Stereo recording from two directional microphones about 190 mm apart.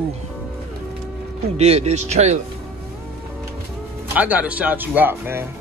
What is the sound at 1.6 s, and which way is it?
Speech, 35° right (ahead or behind).